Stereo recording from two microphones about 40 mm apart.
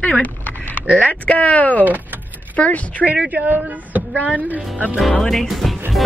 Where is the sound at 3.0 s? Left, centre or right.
Right.